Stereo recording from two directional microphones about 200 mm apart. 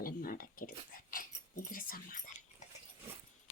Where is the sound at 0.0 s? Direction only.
45° left (ahead or behind).